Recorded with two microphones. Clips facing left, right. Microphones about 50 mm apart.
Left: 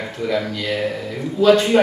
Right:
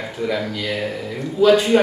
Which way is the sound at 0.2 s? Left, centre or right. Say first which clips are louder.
Left 1 dB; centre.